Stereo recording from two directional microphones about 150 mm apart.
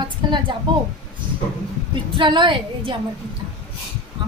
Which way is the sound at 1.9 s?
30° right (ahead or behind).